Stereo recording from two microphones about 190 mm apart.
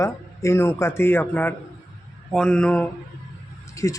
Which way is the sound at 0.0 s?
15° left (ahead or behind).